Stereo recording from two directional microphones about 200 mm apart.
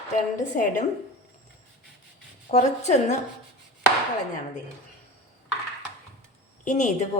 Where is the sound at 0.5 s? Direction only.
40° left (ahead or behind).